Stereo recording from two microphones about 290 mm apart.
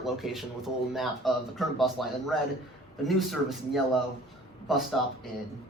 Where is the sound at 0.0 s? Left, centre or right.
Centre.